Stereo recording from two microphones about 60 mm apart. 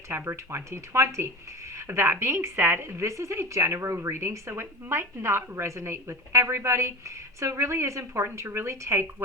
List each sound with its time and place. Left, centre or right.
0.3 s speech: right